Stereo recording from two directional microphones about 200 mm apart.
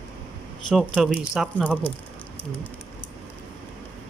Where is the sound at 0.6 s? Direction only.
Centre (ahead or behind).